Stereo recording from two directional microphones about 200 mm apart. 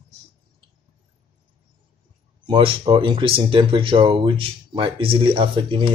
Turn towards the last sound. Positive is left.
turn(degrees=-25)  # may be behind; listen again after turning